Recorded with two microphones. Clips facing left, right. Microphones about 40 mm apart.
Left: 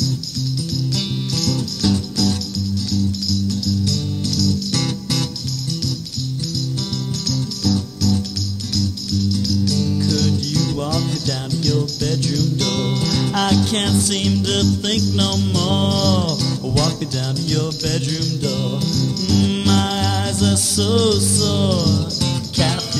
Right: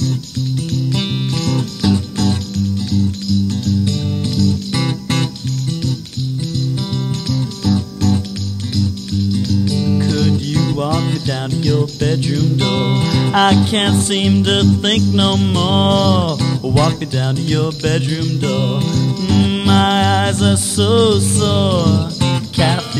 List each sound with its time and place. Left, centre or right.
0.7 s music: right
7.2 s music: right
19.8 s music: right
20.4 s music: right
21.3 s music: right